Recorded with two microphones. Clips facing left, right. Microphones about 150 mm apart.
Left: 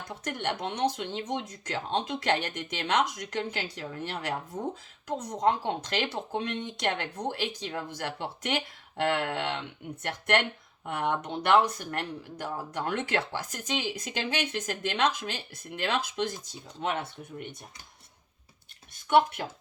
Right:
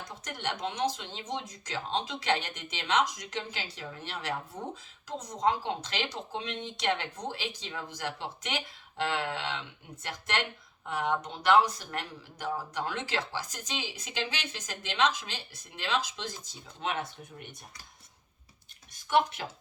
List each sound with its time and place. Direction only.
0.3 s speech: 55° left (ahead or behind)